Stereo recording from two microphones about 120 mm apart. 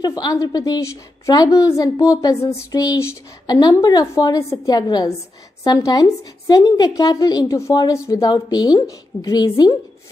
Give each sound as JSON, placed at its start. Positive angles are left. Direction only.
{"t": 0.0, "sound": "a woman's voice", "side_deg": 35}